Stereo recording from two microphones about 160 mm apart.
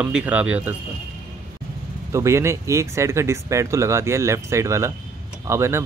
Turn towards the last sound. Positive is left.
turn(degrees=-15)  # may be behind; listen again after turning